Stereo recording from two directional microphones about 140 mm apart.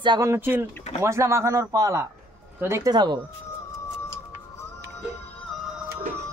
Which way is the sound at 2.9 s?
30° right (ahead or behind).